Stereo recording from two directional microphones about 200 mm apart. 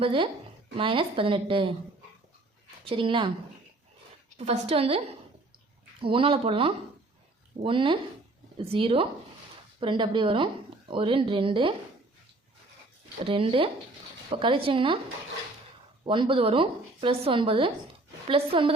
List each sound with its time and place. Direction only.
0.0 s speech: 25° right (ahead or behind)
2.8 s speech: 25° right (ahead or behind)
4.4 s a woman's voice: 30° right (ahead or behind)
13.2 s speech: 25° right (ahead or behind)
16.0 s speech: 25° right (ahead or behind)